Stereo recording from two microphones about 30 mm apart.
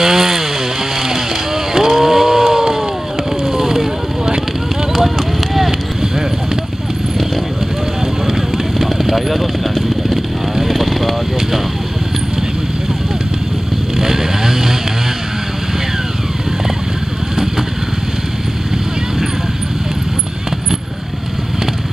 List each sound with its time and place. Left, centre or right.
0.0 s chainsaw: centre
1.9 s chainsaw: centre
3.4 s vehicle: centre
4.9 s a sound: centre
8.4 s vehicle: centre
13.9 s vehicle: centre